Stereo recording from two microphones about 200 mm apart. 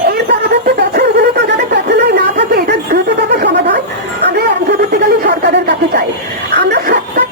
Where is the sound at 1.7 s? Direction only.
55° right (ahead or behind).